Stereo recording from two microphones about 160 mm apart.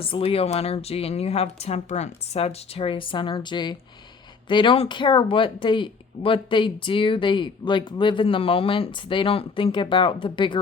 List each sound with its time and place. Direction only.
0.0 s speech: 35° left (ahead or behind)